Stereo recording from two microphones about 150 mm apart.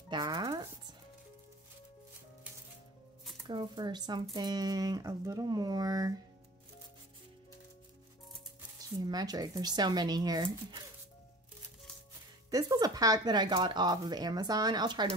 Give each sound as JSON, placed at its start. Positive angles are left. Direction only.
{"t": 0.1, "sound": "music", "side_deg": -25}
{"t": 3.4, "sound": "speech", "side_deg": -30}
{"t": 9.0, "sound": "speech", "side_deg": -25}
{"t": 12.4, "sound": "speech", "side_deg": -25}